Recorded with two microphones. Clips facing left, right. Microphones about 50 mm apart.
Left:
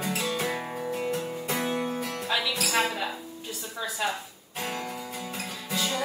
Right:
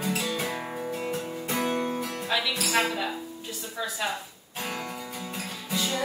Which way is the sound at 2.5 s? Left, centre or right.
Centre.